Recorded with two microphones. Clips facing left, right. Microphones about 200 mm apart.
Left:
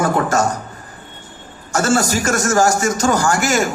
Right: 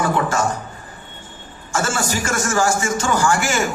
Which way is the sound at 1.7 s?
40° left (ahead or behind).